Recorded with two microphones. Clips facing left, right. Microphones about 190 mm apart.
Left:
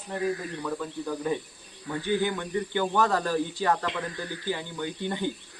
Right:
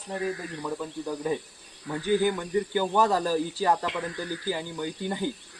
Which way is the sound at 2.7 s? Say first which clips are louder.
Even; 10° right (ahead or behind).